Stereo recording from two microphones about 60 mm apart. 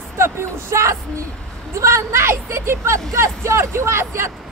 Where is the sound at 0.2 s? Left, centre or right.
Right.